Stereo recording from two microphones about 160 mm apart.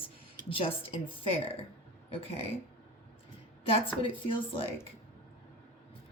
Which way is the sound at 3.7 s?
35° left (ahead or behind).